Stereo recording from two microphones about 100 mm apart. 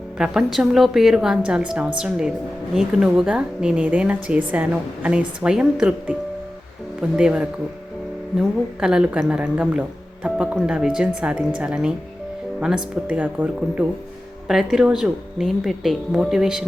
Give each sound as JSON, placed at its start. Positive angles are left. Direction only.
{"t": 0.2, "sound": "a woman's voice", "side_deg": -5}
{"t": 10.2, "sound": "a woman's voice", "side_deg": -10}